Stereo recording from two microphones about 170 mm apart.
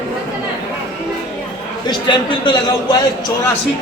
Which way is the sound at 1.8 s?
30° left (ahead or behind).